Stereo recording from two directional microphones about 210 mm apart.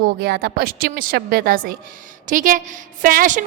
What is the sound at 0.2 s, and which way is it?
A woman's voice, 50° right (ahead or behind).